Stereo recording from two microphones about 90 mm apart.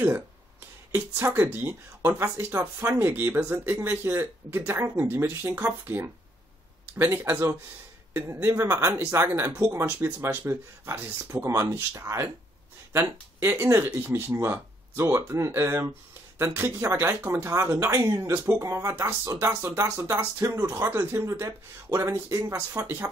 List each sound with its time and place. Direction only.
0.9 s speech: 20° right (ahead or behind)